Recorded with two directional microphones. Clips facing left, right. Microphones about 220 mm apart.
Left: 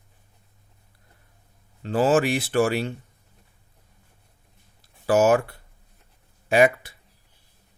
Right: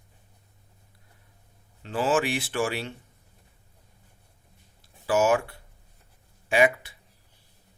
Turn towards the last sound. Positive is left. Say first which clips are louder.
# left 4 dB
turn(degrees=40)  # may be behind; listen again after turning